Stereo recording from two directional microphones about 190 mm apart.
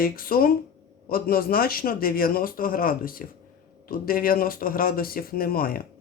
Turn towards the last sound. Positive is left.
turn(degrees=50)  # may be behind; listen again after turning